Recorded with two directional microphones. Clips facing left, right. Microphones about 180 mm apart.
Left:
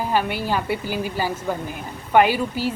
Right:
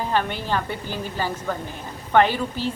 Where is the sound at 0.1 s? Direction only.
10° left (ahead or behind).